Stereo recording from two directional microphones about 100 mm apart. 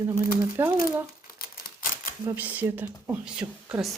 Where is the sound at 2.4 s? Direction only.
15° right (ahead or behind).